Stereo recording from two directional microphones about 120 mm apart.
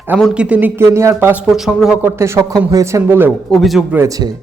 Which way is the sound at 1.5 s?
5° right (ahead or behind).